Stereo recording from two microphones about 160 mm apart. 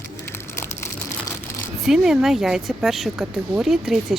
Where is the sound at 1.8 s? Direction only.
5° right (ahead or behind).